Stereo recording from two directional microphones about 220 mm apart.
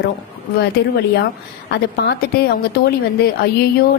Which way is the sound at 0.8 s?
50° left (ahead or behind).